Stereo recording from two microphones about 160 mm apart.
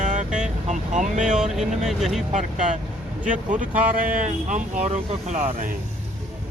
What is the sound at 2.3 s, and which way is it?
Speech, 50° right (ahead or behind).